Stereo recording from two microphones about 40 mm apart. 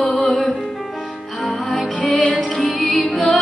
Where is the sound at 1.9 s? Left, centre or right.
Left.